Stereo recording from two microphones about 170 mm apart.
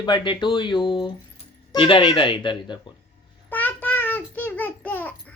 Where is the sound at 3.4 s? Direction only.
10° left (ahead or behind).